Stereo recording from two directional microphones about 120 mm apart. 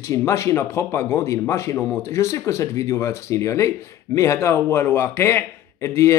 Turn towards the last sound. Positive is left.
turn(degrees=25)  # may be behind; listen again after turning